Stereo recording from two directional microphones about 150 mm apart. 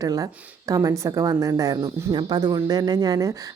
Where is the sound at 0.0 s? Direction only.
25° right (ahead or behind).